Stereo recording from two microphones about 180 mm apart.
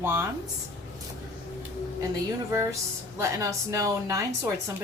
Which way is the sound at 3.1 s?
15° right (ahead or behind).